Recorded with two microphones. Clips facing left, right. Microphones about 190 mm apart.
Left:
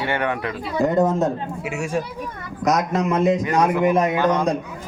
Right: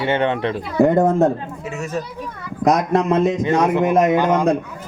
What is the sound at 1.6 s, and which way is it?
Speech, 10° left (ahead or behind).